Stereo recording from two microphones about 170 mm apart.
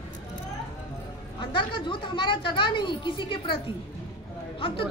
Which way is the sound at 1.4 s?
30° left (ahead or behind).